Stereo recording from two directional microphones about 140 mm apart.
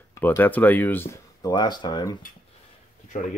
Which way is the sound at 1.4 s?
30° left (ahead or behind).